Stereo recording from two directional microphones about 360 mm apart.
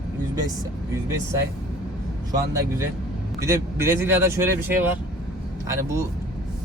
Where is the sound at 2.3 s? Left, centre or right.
Centre.